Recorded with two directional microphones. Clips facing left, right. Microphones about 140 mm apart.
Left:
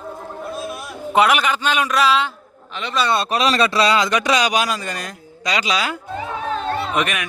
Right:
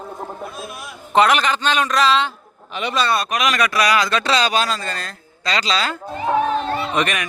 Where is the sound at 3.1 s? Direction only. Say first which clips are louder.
Left 2 dB; 30° left (ahead or behind).